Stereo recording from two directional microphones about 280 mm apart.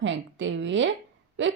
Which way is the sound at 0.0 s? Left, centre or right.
Right.